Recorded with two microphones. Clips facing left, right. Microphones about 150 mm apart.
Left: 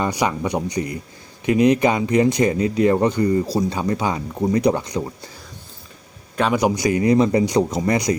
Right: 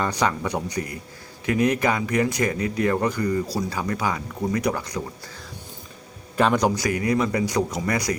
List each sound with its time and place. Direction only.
0.0 s speech: 15° left (ahead or behind)
6.3 s a man's voice: 5° left (ahead or behind)
6.7 s speech: 20° left (ahead or behind)